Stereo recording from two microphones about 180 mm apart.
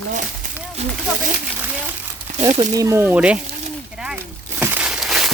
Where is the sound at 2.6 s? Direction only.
20° right (ahead or behind).